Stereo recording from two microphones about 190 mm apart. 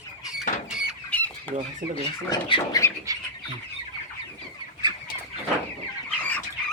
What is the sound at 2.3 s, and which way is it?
Speech, 25° left (ahead or behind).